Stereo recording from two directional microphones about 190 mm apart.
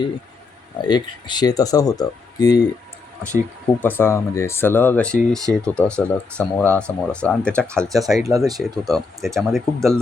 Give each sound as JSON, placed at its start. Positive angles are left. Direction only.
{"t": 0.8, "sound": "speech", "side_deg": 20}
{"t": 3.8, "sound": "speech", "side_deg": 10}
{"t": 5.4, "sound": "speech", "side_deg": -20}
{"t": 5.7, "sound": "speech", "side_deg": 5}
{"t": 8.3, "sound": "speech", "side_deg": -15}
{"t": 8.5, "sound": "speech", "side_deg": 0}